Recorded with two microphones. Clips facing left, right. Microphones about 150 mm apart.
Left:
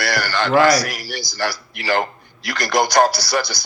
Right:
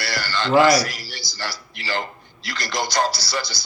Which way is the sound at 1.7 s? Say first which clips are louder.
Left 6 dB; 55° left (ahead or behind).